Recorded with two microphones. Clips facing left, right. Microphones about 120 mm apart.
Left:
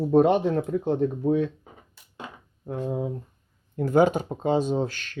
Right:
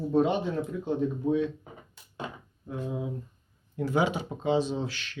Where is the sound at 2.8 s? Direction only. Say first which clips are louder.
Left 5 dB; 45° left (ahead or behind).